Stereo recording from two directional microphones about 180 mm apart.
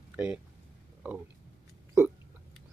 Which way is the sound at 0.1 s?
10° right (ahead or behind).